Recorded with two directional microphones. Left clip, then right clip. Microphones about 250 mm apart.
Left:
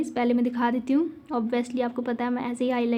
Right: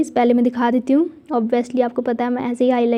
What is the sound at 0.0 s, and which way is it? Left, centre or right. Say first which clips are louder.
A woman's voice: right 9 dB; right.